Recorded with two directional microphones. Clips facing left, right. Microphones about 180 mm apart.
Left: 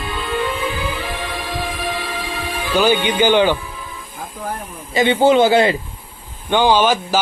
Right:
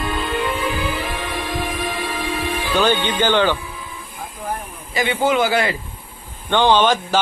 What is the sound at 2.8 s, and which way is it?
Speech, 10° left (ahead or behind).